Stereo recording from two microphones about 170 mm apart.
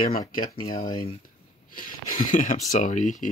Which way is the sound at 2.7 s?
45° left (ahead or behind).